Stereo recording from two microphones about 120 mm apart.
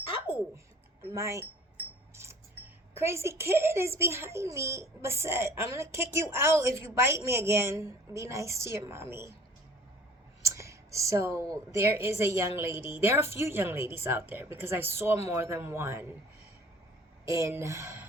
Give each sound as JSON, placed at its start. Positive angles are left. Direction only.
{"t": 1.1, "sound": "a child's voice", "side_deg": -25}
{"t": 2.9, "sound": "a child's voice", "side_deg": -20}
{"t": 10.5, "sound": "a child's voice", "side_deg": -25}
{"t": 17.2, "sound": "a child's voice", "side_deg": -25}